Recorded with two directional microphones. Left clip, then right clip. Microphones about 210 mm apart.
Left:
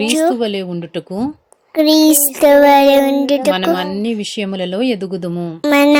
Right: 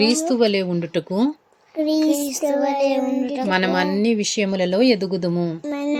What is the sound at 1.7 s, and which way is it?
Music, 50° left (ahead or behind).